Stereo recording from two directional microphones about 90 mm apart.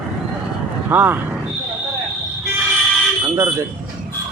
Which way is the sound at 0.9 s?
20° right (ahead or behind).